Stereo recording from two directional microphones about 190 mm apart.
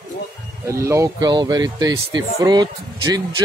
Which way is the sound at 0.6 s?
15° right (ahead or behind).